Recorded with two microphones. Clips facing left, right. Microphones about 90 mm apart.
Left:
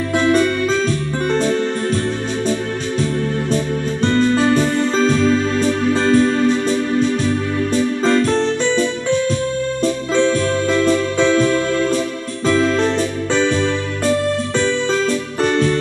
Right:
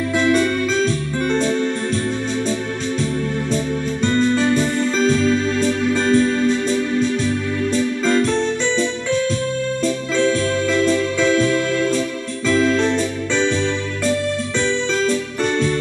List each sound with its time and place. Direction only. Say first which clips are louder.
0.2 s music: left 2 dB; 45° left (ahead or behind)
4.0 s music: left 2 dB; 45° left (ahead or behind)
8.0 s music: left 2 dB; 40° left (ahead or behind)
10.1 s electric piano: left 2 dB; 35° left (ahead or behind)
12.4 s music: left 1 dB; 40° left (ahead or behind)
15.4 s music: left 4 dB; 45° left (ahead or behind)